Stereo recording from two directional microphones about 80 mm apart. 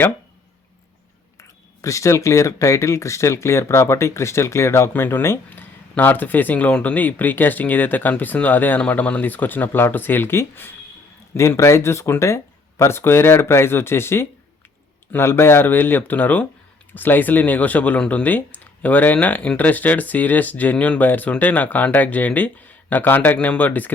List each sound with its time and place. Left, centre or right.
1.4 s speech: left